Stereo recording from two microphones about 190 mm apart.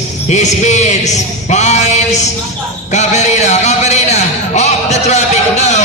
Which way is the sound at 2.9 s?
40° left (ahead or behind).